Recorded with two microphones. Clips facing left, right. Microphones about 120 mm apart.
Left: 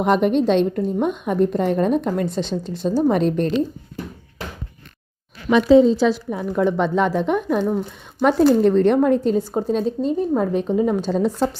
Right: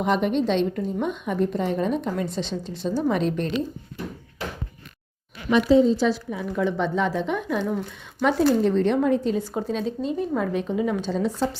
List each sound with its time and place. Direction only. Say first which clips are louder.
0.0 s a woman's voice: left 5 dB; 50° left (ahead or behind)
5.5 s speech: left 5 dB; 90° left
6.3 s a woman's voice: left 5 dB; 45° left (ahead or behind)
6.7 s a woman's voice: left 5 dB; 70° left (ahead or behind); by 9.4 s 45° left (ahead or behind)
9.4 s a woman's voice: left 6 dB; 30° left (ahead or behind); by 11.4 s 45° left (ahead or behind)